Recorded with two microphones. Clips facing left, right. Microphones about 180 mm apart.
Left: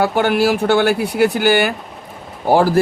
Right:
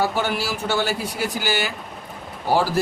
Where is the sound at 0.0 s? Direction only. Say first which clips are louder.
Left 8 dB; 60° left (ahead or behind).